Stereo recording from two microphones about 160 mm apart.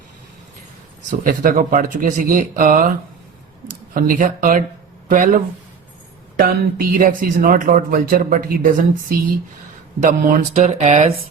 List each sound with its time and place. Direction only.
1.2 s speech: 60° right (ahead or behind)
3.9 s speech: 60° right (ahead or behind)
6.4 s speech: 60° right (ahead or behind)
10.0 s speech: 55° right (ahead or behind)